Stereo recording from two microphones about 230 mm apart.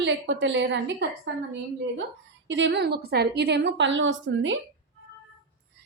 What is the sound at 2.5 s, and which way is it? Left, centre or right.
A woman's voice, right.